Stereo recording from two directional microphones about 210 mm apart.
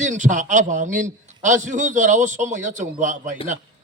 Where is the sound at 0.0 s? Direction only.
35° right (ahead or behind).